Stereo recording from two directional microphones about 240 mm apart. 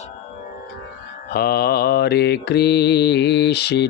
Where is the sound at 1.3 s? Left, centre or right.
Left.